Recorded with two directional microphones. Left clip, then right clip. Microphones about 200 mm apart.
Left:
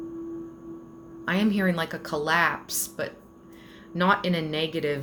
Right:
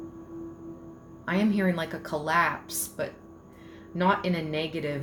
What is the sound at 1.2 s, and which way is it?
Speech, 30° left (ahead or behind).